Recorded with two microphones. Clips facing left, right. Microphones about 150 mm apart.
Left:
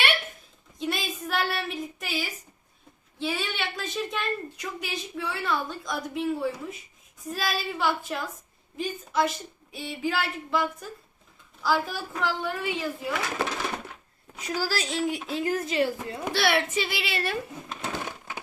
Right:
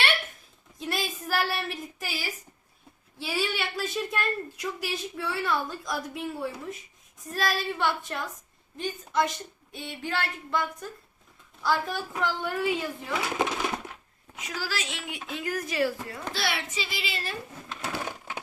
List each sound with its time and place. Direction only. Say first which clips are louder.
0.8 s a woman's voice: left 2 dB; centre (ahead or behind)
13.4 s a sound: right 2 dB; 10° right (ahead or behind)
14.3 s a woman's voice: left 5 dB; 40° left (ahead or behind)
16.3 s a woman's voice: left 8 dB; 65° left (ahead or behind)